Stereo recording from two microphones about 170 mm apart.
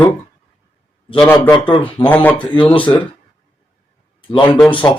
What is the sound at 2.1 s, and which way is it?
Speech, 10° left (ahead or behind).